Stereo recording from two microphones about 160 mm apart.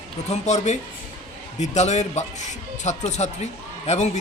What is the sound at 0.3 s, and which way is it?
Speech, 45° left (ahead or behind).